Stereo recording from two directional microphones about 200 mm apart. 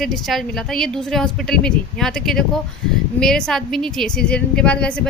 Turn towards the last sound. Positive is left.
turn(degrees=5)  # may be behind; listen again after turning